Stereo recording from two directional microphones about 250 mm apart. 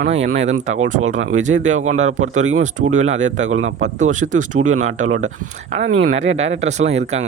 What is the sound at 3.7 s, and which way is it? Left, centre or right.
Speech, right.